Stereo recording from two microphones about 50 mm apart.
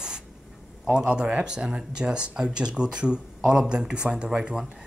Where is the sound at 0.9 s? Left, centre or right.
Centre.